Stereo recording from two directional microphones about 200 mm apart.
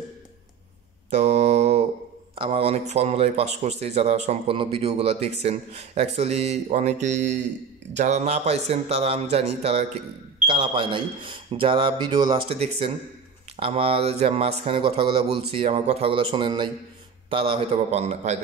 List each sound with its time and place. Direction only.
1.1 s mantra: 35° right (ahead or behind)
2.3 s speech: 25° right (ahead or behind)